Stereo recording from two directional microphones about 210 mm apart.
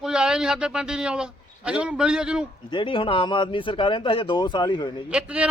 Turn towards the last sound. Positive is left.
turn(degrees=-5)  # may be behind; listen again after turning